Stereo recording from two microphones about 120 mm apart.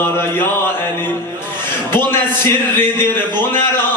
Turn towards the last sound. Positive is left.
turn(degrees=20)  # may be behind; listen again after turning